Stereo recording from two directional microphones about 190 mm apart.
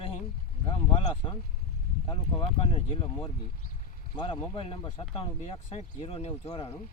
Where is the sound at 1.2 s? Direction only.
25° left (ahead or behind).